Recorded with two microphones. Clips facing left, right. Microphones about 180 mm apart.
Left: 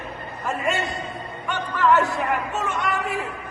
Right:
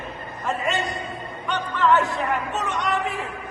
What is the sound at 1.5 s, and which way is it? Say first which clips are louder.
Speech: even; centre (ahead or behind).